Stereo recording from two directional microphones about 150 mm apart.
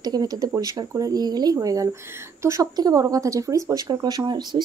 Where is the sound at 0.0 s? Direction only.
25° right (ahead or behind).